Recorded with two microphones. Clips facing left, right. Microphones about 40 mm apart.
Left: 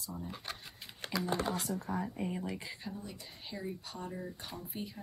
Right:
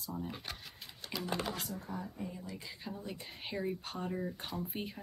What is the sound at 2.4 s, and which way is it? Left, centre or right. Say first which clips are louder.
Speech: left 5 dB; left.